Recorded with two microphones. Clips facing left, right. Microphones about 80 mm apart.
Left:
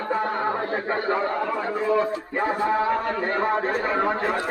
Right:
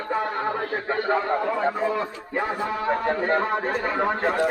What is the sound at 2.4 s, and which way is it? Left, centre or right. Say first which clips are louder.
Speech: left 4 dB; left.